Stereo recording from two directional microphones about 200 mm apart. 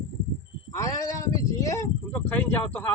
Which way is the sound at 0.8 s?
15° left (ahead or behind).